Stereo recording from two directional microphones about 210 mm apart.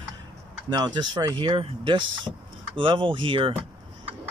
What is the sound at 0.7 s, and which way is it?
Speech, 20° right (ahead or behind).